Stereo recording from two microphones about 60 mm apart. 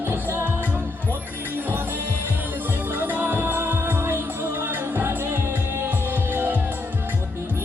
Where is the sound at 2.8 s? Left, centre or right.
Right.